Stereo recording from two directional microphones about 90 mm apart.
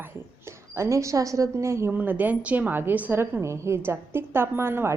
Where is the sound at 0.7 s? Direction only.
35° right (ahead or behind).